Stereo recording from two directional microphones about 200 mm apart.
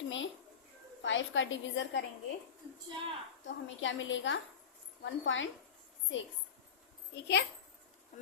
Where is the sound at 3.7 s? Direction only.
70° left (ahead or behind).